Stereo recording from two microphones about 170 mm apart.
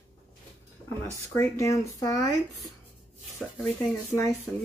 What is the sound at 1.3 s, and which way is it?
Speech, 15° left (ahead or behind).